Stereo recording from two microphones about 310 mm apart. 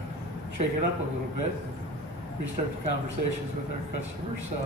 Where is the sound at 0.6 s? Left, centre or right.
Right.